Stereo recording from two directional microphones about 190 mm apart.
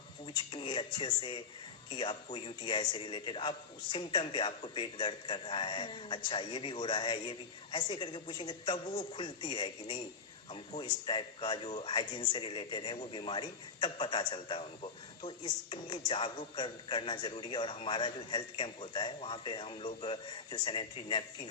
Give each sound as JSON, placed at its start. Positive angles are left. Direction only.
{"t": 0.3, "sound": "a man's voice", "side_deg": 25}